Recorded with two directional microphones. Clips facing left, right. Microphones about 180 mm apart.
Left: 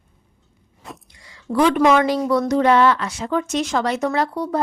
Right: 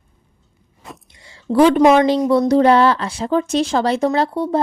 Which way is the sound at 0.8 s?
Centre (ahead or behind).